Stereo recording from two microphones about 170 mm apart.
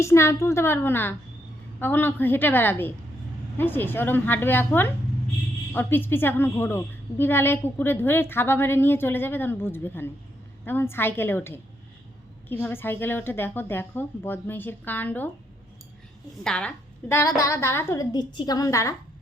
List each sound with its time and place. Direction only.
0.0 s a woman's voice: 15° left (ahead or behind)
16.4 s a woman's voice: 5° left (ahead or behind)